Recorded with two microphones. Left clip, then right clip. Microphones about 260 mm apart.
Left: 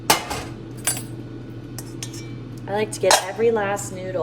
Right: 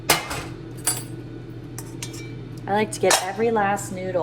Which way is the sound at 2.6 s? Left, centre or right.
Right.